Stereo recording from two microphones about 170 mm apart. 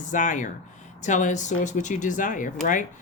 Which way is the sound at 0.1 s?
50° left (ahead or behind).